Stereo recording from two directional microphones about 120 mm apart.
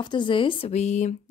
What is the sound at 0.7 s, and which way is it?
Speech, 70° left (ahead or behind).